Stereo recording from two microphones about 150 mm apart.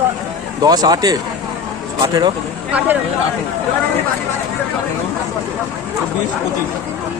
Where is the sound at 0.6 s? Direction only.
25° right (ahead or behind).